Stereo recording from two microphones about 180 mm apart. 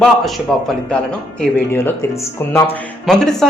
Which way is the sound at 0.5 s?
Centre (ahead or behind).